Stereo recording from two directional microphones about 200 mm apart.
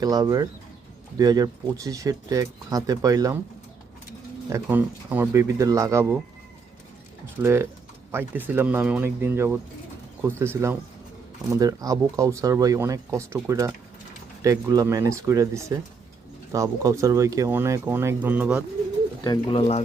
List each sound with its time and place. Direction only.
0.0 s speech: 20° right (ahead or behind)
4.4 s speech: 15° right (ahead or behind)
7.4 s speech: 10° right (ahead or behind)
19.2 s speech: 20° left (ahead or behind)